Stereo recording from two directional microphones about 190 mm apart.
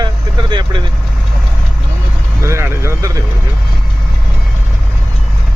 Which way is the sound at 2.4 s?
15° right (ahead or behind).